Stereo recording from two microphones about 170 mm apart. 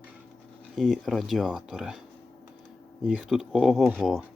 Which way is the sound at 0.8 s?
Centre (ahead or behind).